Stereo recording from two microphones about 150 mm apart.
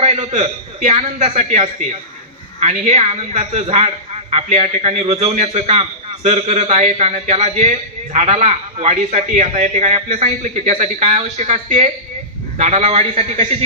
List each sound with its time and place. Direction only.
0.0 s a man's voice: 45° right (ahead or behind)